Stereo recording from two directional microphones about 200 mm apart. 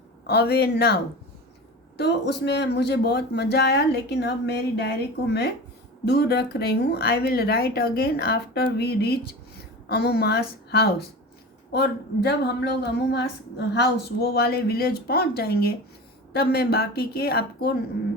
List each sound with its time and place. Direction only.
0.3 s speech: 55° left (ahead or behind)
2.0 s speech: 55° left (ahead or behind)